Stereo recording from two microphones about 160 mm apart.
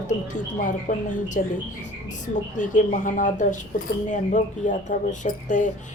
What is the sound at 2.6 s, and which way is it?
Speech, 50° left (ahead or behind).